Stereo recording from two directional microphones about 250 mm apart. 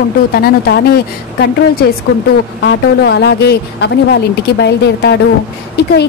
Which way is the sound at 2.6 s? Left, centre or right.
Left.